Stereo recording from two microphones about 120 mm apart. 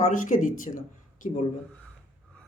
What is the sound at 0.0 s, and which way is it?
Speech, 90° left.